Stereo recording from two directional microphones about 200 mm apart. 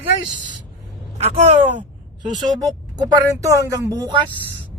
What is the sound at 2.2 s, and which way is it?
Speech, 20° right (ahead or behind).